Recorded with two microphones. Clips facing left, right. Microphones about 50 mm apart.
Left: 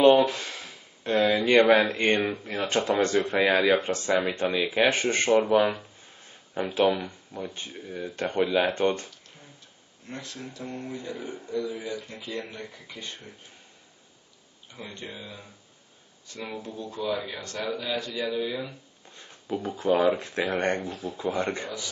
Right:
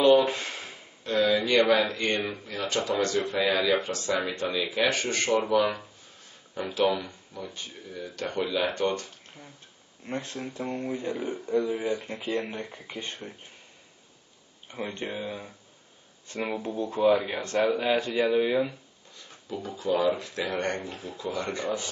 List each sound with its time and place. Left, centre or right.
0.2 s a sound: right
1.0 s speech: left
10.0 s a man's voice: right
14.7 s a man's voice: right
19.1 s speech: left
21.6 s a man's voice: right